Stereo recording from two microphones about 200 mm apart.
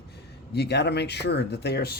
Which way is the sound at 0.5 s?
55° left (ahead or behind).